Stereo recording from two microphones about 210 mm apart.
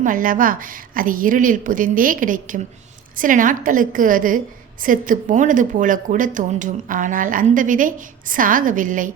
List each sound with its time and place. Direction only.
0.0 s speech: 40° right (ahead or behind)